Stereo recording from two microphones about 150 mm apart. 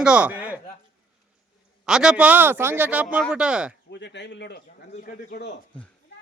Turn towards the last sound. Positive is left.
turn(degrees=90)